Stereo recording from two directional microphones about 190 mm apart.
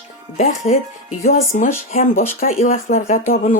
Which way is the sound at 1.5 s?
45° left (ahead or behind).